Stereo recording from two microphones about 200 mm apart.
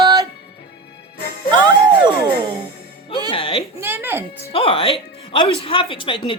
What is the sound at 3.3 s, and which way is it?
Speech, 25° left (ahead or behind).